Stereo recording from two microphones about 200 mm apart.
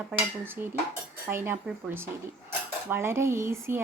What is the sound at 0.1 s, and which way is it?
A woman's voice, 10° right (ahead or behind).